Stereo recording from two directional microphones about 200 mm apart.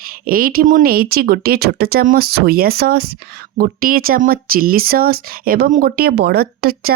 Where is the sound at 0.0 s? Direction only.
45° right (ahead or behind).